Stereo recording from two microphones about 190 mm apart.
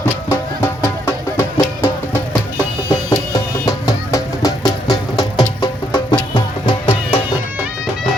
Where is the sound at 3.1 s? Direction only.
20° left (ahead or behind).